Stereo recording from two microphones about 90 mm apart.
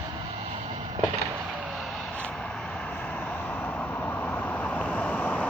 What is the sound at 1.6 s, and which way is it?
Vehicle, 5° right (ahead or behind).